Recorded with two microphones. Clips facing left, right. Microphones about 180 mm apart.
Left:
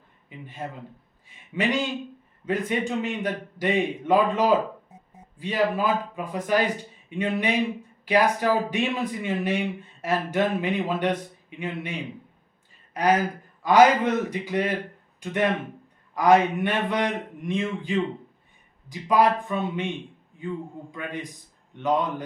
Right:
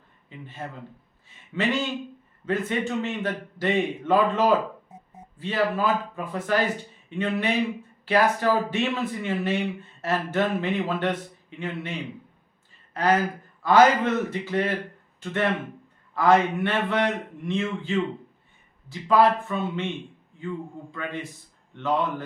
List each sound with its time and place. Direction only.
0.3 s a man's voice: 10° left (ahead or behind)